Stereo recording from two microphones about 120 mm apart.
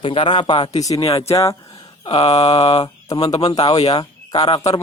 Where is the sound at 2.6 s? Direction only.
40° left (ahead or behind).